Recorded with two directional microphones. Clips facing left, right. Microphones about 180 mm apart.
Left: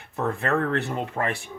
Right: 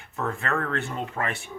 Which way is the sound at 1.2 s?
30° left (ahead or behind).